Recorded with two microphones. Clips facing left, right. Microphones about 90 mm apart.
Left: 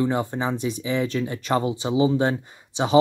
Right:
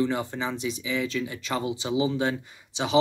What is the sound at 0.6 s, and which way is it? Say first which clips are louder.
Speech: left 4 dB; 45° left (ahead or behind).